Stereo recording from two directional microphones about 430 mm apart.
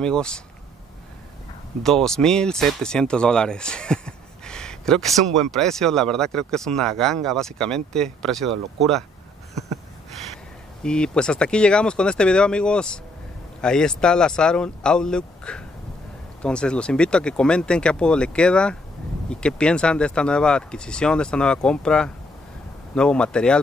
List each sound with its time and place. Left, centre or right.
0.0 s speech: centre
1.8 s speech: centre
10.8 s speech: centre